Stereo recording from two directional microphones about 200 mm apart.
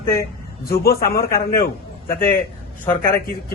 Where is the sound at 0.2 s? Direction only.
50° left (ahead or behind).